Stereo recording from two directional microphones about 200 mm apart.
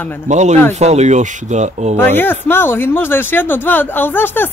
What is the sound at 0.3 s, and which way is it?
Speech, 35° right (ahead or behind).